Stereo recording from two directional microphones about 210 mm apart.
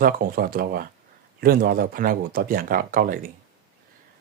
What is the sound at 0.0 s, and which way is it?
Speech, 45° right (ahead or behind).